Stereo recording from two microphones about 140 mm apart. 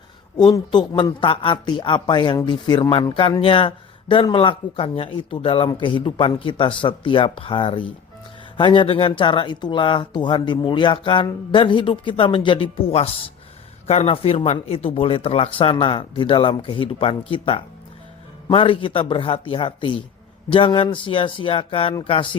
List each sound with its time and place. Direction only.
0.3 s speech: 30° left (ahead or behind)